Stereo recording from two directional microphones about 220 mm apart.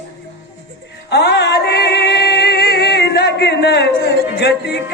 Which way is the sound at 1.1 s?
50° left (ahead or behind).